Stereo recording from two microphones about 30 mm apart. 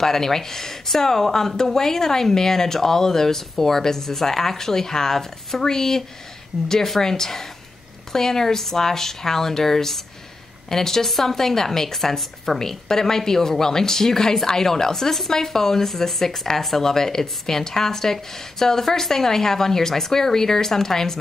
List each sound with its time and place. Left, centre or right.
0.0 s speech: centre